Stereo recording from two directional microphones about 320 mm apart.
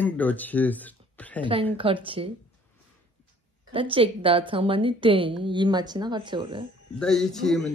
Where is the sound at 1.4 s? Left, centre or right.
Centre.